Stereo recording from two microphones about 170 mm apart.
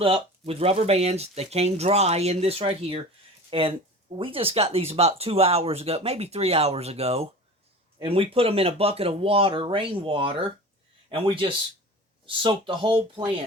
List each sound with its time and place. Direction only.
0.0 s speech: 35° right (ahead or behind)